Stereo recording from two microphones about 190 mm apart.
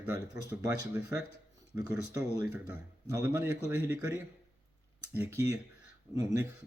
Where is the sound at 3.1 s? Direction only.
15° right (ahead or behind).